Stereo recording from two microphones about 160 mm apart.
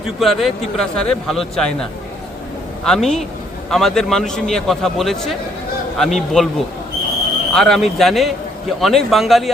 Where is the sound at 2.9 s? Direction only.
Centre (ahead or behind).